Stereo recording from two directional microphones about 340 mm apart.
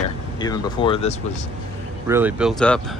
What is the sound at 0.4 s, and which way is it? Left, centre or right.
Speech, centre.